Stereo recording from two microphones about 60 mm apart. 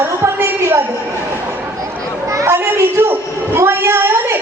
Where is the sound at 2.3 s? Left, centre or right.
Right.